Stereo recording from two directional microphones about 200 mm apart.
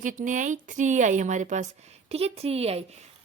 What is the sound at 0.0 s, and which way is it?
A woman's voice, 40° right (ahead or behind).